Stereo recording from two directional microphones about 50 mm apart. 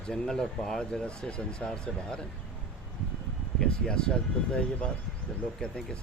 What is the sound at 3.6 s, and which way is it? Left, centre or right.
Speech, centre.